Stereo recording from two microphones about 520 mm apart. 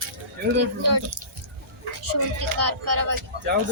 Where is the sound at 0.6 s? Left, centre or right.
Right.